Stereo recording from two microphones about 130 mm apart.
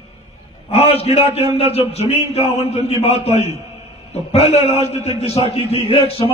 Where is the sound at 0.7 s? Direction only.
50° left (ahead or behind).